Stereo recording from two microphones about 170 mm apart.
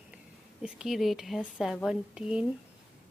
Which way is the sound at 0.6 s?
Centre (ahead or behind).